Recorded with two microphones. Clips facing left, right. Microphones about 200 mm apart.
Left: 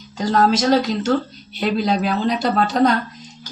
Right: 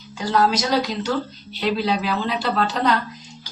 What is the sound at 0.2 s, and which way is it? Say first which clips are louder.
Speech: left 3 dB; 45° left (ahead or behind).